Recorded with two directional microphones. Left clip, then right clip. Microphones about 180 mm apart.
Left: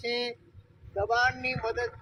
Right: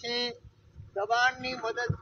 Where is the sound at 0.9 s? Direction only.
Centre (ahead or behind).